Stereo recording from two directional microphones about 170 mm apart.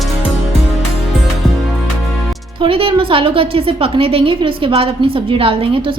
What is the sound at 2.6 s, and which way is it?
A woman's voice, 30° right (ahead or behind).